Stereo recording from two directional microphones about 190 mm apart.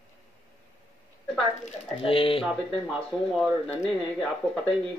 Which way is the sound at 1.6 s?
30° left (ahead or behind).